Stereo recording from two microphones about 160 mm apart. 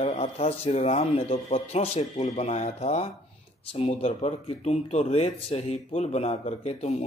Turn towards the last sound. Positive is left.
turn(degrees=40)  # may be behind; listen again after turning